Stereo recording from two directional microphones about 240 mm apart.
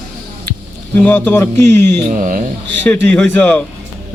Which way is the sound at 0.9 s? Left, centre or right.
Centre.